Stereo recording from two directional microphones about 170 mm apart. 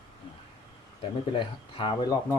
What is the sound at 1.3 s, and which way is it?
Speech, 30° left (ahead or behind).